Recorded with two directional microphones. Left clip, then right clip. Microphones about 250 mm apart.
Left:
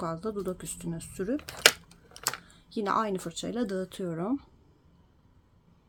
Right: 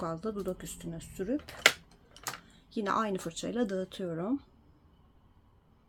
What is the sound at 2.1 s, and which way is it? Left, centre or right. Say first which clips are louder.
Typing: left 7 dB; left.